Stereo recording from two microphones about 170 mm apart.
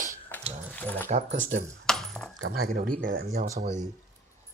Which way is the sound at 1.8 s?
5° left (ahead or behind).